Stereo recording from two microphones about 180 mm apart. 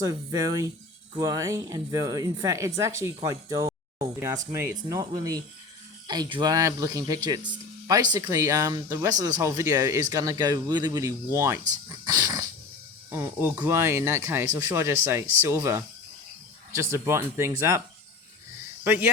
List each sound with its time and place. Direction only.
0.0 s speech: 20° right (ahead or behind)
18.9 s speech: 10° right (ahead or behind)